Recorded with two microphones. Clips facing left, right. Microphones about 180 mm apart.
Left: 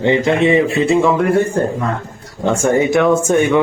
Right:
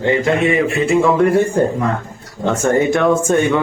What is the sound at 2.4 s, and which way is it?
Speech, 10° left (ahead or behind).